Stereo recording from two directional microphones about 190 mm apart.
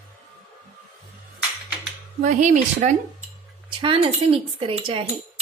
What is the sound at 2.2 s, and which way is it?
Speech, 40° right (ahead or behind).